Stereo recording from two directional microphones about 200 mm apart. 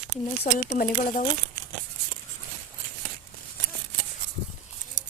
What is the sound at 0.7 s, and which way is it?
Speech, 45° left (ahead or behind).